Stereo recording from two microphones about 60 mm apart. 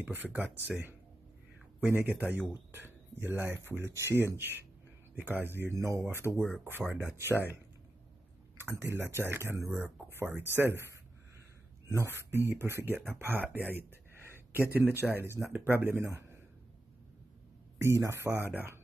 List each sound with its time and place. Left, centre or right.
0.0 s speech: right
2.0 s speech: right
2.7 s speech: right
5.7 s speech: right
6.3 s speech: centre
7.2 s speech: right
8.5 s speech: right
9.7 s speech: right
11.9 s a man's voice: right
17.7 s speech: right